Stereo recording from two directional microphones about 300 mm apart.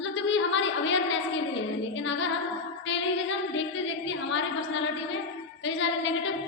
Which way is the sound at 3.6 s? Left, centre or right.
Left.